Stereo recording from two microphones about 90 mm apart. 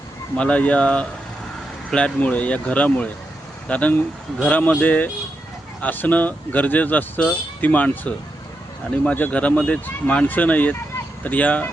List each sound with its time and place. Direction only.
0.3 s speech: 15° left (ahead or behind)